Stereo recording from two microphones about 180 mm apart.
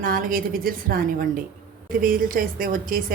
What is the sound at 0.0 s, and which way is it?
A woman's voice, 50° right (ahead or behind).